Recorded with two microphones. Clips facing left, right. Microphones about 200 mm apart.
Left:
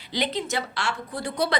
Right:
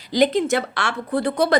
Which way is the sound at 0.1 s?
45° right (ahead or behind).